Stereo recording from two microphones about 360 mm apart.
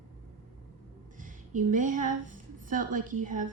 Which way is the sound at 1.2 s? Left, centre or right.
Right.